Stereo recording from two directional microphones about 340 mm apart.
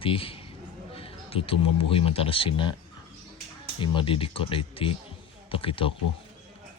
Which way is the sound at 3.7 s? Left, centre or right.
Centre.